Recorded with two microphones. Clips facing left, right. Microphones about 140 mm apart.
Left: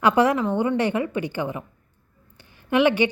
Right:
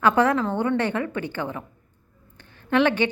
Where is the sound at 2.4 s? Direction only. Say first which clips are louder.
Left 1 dB; 10° left (ahead or behind).